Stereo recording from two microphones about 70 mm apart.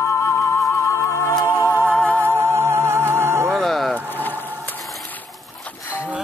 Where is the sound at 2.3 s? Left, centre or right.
Right.